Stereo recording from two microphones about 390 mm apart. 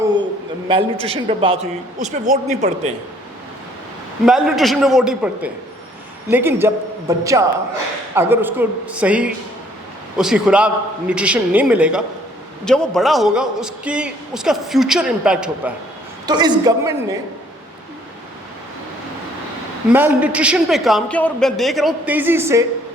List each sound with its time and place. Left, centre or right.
0.7 s a woman's voice: centre
4.3 s a man's voice: centre
19.9 s a man's voice: centre